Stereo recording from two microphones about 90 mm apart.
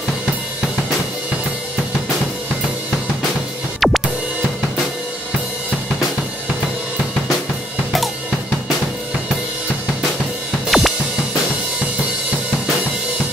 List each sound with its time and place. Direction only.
3.8 s drum: centre (ahead or behind)
10.7 s drum kit: 5° right (ahead or behind)